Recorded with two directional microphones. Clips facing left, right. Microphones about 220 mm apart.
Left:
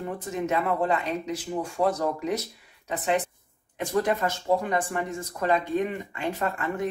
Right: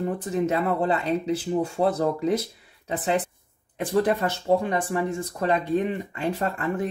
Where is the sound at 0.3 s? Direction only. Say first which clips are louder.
Right 2 dB; 35° right (ahead or behind).